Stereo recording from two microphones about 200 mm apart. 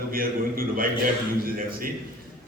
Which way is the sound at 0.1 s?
45° right (ahead or behind).